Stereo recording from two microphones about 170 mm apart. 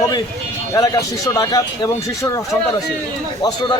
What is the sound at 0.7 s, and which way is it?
A man's voice, 20° left (ahead or behind).